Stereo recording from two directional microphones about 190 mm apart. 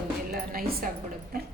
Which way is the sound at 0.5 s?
50° right (ahead or behind).